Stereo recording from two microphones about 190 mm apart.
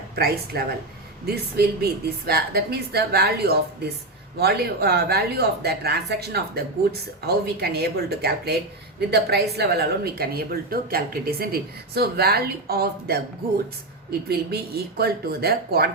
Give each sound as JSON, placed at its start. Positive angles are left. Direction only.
{"t": 0.2, "sound": "a woman's voice", "side_deg": -55}
{"t": 7.6, "sound": "a woman's voice", "side_deg": -55}